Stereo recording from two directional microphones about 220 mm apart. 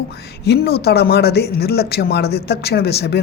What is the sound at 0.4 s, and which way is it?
Speech, 45° left (ahead or behind).